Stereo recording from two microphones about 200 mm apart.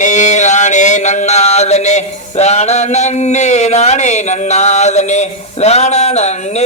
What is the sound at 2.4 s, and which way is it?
Chant, 35° left (ahead or behind).